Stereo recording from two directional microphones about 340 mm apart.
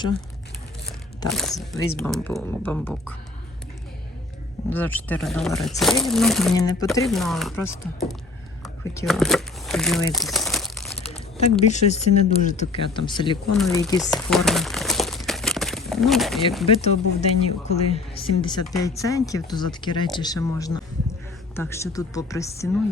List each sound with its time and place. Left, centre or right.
1.3 s speech: centre
4.7 s speech: centre
8.6 s crumpling: centre
11.1 s speech: centre
13.6 s crumpling: centre
16.6 s speech: centre